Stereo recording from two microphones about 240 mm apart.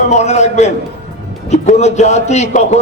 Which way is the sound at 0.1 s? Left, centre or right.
Left.